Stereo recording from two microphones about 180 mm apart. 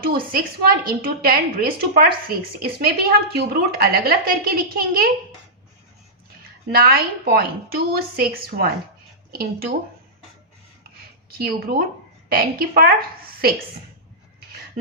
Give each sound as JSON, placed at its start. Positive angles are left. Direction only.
{"t": 0.0, "sound": "a woman's voice", "side_deg": -55}
{"t": 6.4, "sound": "a woman's voice", "side_deg": -60}
{"t": 11.3, "sound": "a woman's voice", "side_deg": -60}